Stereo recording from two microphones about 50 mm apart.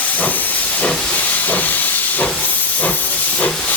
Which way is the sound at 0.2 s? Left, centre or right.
Left.